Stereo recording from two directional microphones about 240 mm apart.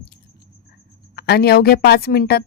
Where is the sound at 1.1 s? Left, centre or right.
Left.